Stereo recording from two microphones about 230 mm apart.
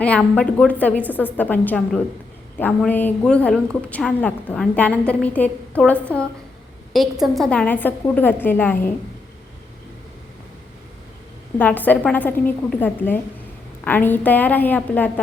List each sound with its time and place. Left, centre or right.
0.0 s a woman's voice: centre
11.5 s a woman's voice: centre